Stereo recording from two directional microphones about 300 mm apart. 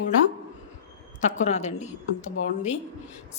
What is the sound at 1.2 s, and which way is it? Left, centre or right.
Speech, left.